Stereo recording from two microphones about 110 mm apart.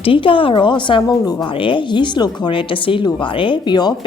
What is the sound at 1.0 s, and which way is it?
Speech, 35° left (ahead or behind).